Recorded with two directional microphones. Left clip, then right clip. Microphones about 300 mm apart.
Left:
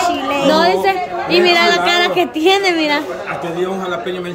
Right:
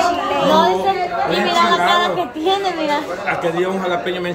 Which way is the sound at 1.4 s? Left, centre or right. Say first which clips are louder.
Left 3 dB; left.